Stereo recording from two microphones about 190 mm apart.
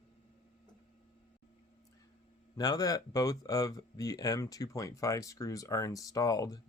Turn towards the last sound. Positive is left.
turn(degrees=20)  # may be behind; listen again after turning